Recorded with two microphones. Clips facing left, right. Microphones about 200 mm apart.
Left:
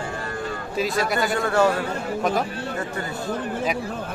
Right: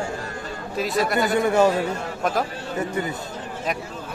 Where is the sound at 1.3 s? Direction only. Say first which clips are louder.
Right 3 dB; 20° right (ahead or behind).